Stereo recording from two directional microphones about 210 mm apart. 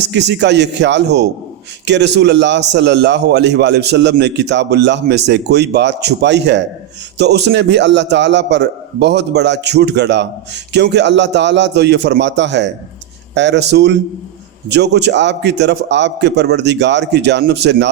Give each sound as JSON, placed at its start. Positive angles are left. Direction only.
{"t": 0.0, "sound": "a man's voice", "side_deg": -55}